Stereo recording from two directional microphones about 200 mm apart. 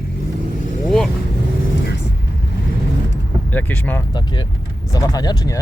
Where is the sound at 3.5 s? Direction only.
10° left (ahead or behind).